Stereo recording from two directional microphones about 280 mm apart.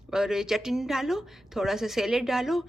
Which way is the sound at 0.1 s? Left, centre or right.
Centre.